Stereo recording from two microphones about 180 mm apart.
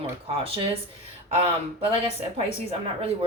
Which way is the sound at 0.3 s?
30° right (ahead or behind).